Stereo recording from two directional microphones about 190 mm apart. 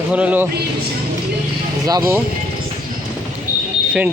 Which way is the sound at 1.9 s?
15° right (ahead or behind).